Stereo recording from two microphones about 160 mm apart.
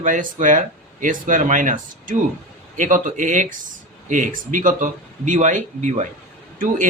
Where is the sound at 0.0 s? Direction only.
55° right (ahead or behind).